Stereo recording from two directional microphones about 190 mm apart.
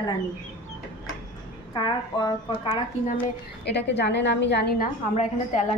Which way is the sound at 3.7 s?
65° left (ahead or behind).